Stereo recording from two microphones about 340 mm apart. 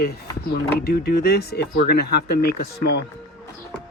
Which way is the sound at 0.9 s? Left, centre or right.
Left.